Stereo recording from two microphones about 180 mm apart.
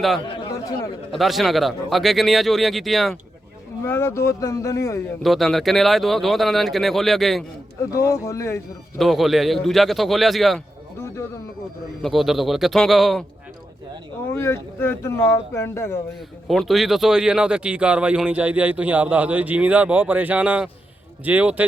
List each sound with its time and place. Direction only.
1.1 s speech: centre (ahead or behind)
3.8 s speech: 15° left (ahead or behind)
5.2 s speech: centre (ahead or behind)
7.9 s speech: 15° left (ahead or behind)
9.0 s speech: centre (ahead or behind)
12.0 s speech: centre (ahead or behind)
14.3 s speech: 15° left (ahead or behind)
16.5 s speech: centre (ahead or behind)